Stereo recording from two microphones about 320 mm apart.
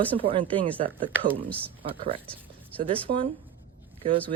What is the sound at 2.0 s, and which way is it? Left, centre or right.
Speech, centre.